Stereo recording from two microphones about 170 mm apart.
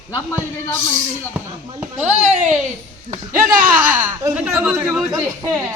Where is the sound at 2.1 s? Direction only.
45° right (ahead or behind).